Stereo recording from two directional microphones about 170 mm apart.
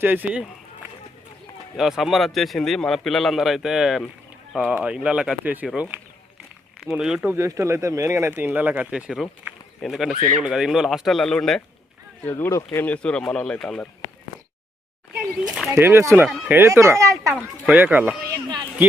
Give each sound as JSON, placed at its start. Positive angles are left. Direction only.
{"t": 0.0, "sound": "speech", "side_deg": -10}
{"t": 1.7, "sound": "speech", "side_deg": 0}
{"t": 7.3, "sound": "speech", "side_deg": -15}
{"t": 12.2, "sound": "speech", "side_deg": 15}
{"t": 15.1, "sound": "speech", "side_deg": 0}
{"t": 18.3, "sound": "a man's voice", "side_deg": -20}